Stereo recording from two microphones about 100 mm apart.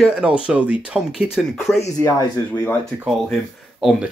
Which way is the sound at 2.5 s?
25° left (ahead or behind).